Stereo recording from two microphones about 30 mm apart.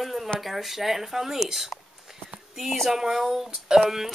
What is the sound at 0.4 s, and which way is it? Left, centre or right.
Speech, centre.